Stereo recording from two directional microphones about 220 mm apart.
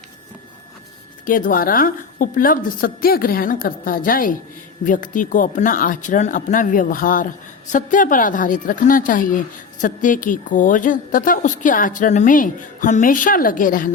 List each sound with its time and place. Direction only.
1.2 s speech: 40° left (ahead or behind)